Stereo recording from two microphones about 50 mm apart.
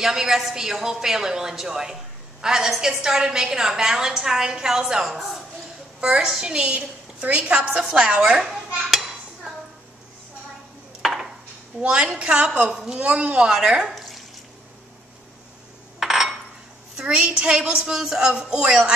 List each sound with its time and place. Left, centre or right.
0.0 s a woman's voice: centre
11.0 s a sound: centre
11.8 s a woman's voice: right
13.5 s a woman's voice: centre
16.0 s coin: centre
16.9 s a woman's voice: centre